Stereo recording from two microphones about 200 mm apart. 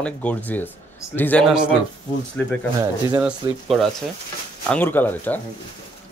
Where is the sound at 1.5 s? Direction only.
5° right (ahead or behind).